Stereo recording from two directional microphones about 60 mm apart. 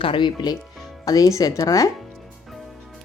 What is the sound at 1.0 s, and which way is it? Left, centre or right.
Speech, left.